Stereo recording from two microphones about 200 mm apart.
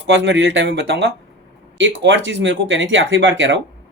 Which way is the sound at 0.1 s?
65° right (ahead or behind).